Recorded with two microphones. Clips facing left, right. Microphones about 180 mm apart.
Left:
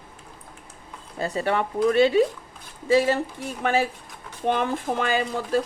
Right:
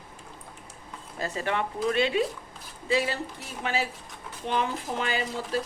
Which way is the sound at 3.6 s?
50° left (ahead or behind).